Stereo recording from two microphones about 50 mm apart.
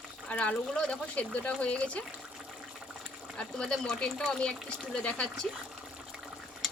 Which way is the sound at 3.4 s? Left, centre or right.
Centre.